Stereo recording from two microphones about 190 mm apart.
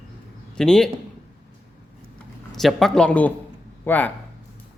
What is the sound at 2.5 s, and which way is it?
A man's voice, centre (ahead or behind).